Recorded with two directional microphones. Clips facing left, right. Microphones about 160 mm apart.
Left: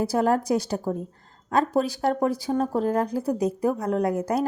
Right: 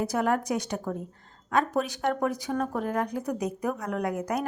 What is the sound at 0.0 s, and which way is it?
A woman's voice, 35° left (ahead or behind).